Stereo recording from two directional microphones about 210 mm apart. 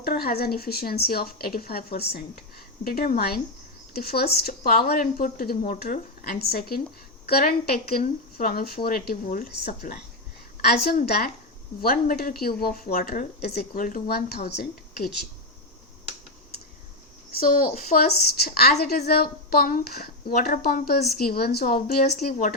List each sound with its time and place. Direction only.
0.0 s a woman's voice: 45° left (ahead or behind)
17.4 s a woman's voice: 40° left (ahead or behind)